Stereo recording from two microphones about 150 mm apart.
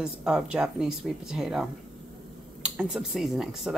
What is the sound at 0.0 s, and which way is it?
Speech, 5° right (ahead or behind).